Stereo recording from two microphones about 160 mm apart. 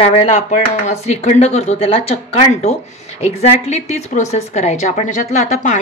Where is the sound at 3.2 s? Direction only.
40° left (ahead or behind).